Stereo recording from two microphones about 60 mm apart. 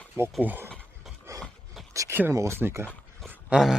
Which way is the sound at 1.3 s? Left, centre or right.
Right.